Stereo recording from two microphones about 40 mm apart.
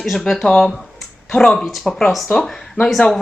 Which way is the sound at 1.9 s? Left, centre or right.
Centre.